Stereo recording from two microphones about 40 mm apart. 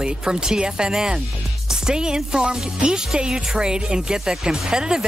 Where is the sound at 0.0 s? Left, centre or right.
Centre.